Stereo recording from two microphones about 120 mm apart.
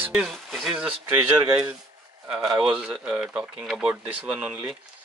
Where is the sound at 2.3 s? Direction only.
5° right (ahead or behind).